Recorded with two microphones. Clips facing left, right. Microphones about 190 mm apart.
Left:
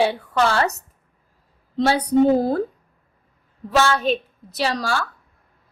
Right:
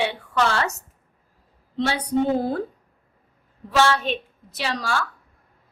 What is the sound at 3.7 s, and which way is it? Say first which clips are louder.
A woman's voice: left 2 dB; 40° left (ahead or behind).